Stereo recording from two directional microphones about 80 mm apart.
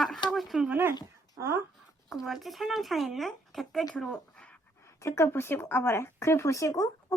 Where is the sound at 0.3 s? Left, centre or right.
Centre.